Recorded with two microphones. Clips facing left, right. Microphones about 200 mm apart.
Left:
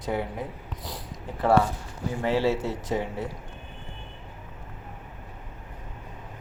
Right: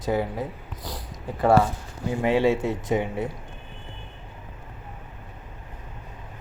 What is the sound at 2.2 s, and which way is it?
Speech, 10° right (ahead or behind).